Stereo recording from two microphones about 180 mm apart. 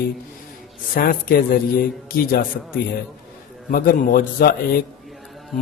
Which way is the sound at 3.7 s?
55° left (ahead or behind).